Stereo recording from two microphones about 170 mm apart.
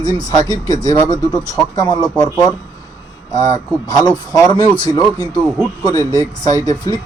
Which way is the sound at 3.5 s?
25° left (ahead or behind).